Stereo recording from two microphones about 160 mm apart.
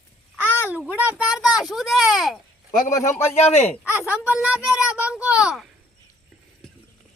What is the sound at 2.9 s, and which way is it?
Speech, 20° left (ahead or behind).